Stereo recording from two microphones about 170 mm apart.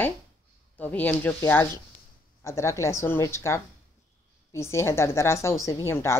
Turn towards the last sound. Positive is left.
turn(degrees=15)  # may be behind; listen again after turning